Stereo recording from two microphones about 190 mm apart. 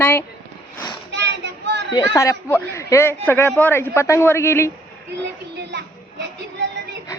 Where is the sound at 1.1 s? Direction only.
65° right (ahead or behind).